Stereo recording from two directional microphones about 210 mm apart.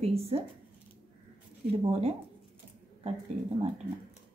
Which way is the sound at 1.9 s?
30° right (ahead or behind).